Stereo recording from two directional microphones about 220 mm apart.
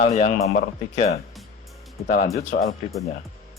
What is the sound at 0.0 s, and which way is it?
Speech, 35° left (ahead or behind).